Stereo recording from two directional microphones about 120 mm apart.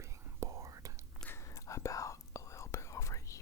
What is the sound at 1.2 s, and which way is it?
Whispering, 25° left (ahead or behind).